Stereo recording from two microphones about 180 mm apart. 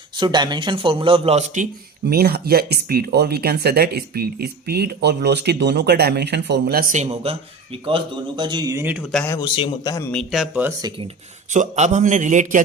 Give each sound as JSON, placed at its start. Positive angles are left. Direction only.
{"t": 0.2, "sound": "speech", "side_deg": -25}
{"t": 2.0, "sound": "speech", "side_deg": -60}
{"t": 9.1, "sound": "speech", "side_deg": 15}
{"t": 10.1, "sound": "speech", "side_deg": 0}
{"t": 11.5, "sound": "a man's voice", "side_deg": -45}